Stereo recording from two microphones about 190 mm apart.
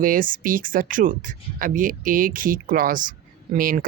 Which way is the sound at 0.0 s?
45° right (ahead or behind).